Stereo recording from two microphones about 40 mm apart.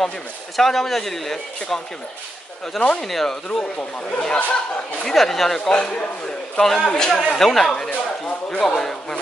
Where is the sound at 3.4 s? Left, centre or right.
Left.